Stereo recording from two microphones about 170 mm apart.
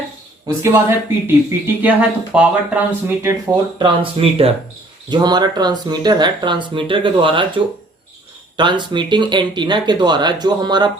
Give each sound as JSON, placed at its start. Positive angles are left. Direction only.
{"t": 0.4, "sound": "speech", "side_deg": -15}
{"t": 3.2, "sound": "speech", "side_deg": -25}